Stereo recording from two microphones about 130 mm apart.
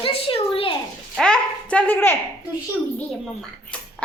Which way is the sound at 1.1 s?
5° left (ahead or behind).